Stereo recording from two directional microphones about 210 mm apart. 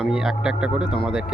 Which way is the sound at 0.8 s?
25° left (ahead or behind).